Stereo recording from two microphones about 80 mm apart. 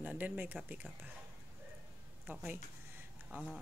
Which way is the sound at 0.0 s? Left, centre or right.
Right.